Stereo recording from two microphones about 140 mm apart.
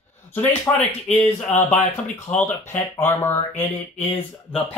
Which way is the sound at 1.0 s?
10° left (ahead or behind).